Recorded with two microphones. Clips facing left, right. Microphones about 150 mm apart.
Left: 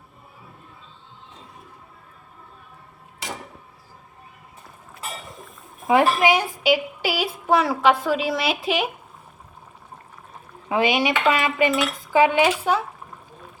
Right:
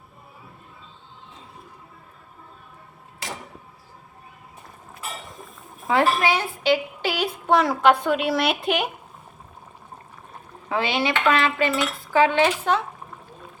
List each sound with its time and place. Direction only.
5.9 s a woman's voice: 15° left (ahead or behind)
10.7 s cutlery: 15° left (ahead or behind)